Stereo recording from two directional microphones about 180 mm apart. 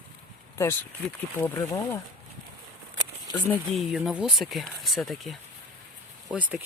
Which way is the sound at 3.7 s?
Centre (ahead or behind).